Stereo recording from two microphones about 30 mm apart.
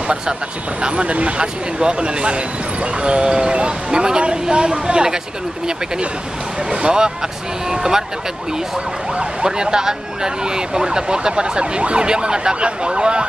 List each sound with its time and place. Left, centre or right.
0.8 s speech: right
1.4 s speech: right
6.7 s speech: right
7.7 s speech: centre
9.4 s speech: right